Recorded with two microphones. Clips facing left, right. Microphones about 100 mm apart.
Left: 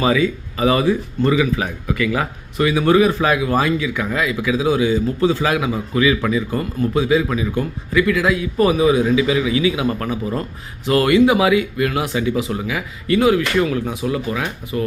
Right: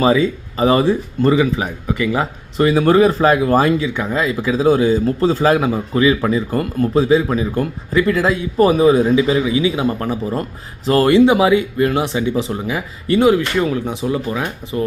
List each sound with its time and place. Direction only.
0.0 s speech: 30° right (ahead or behind)